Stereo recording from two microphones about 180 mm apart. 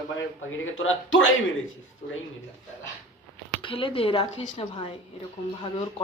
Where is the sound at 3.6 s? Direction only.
30° left (ahead or behind).